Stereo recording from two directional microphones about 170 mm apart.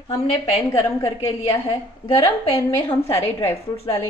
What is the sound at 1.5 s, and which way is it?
A woman's voice, 20° left (ahead or behind).